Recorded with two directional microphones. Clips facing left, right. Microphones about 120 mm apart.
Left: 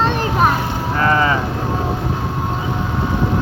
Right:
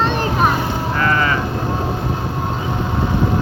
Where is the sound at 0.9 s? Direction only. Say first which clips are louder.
Left 3 dB; 25° left (ahead or behind).